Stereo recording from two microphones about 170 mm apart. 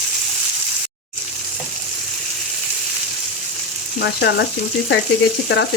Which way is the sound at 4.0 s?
80° left.